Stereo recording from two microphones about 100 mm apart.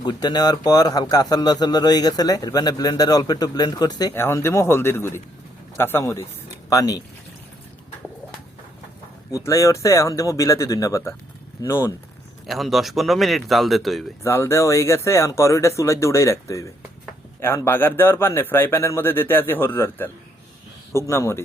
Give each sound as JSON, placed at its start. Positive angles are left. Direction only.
{"t": 0.0, "sound": "speech", "side_deg": 45}
{"t": 4.1, "sound": "speech", "side_deg": 25}
{"t": 6.7, "sound": "speech", "side_deg": 35}
{"t": 9.3, "sound": "speech", "side_deg": 30}
{"t": 12.5, "sound": "speech", "side_deg": 0}
{"t": 14.3, "sound": "speech", "side_deg": 25}